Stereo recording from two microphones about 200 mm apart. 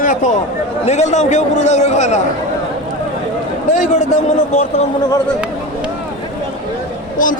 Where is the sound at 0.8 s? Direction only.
35° left (ahead or behind).